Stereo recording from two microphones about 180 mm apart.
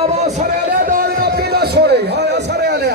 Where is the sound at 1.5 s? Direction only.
65° right (ahead or behind).